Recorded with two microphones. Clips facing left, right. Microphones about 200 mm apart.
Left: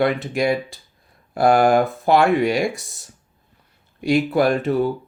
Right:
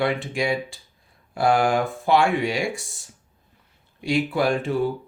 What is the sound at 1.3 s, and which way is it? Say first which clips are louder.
Speech: left 5 dB; 40° left (ahead or behind).